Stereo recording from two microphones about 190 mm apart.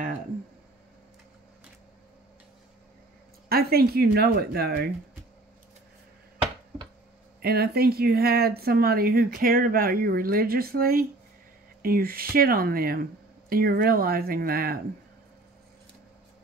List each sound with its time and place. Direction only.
3.4 s speech: 55° right (ahead or behind)
7.4 s speech: 55° right (ahead or behind)